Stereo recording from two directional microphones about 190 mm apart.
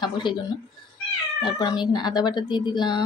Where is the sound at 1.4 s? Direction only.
25° left (ahead or behind).